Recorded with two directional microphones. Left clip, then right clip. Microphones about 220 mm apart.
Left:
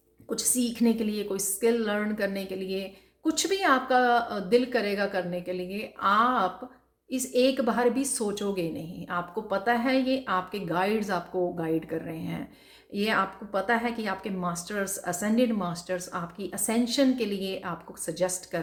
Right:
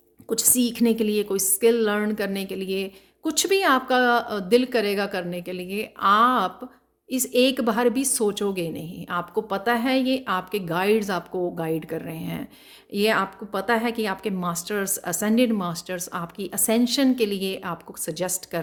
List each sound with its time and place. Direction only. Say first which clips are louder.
0.3 s a woman's voice: right 6 dB; 55° right (ahead or behind)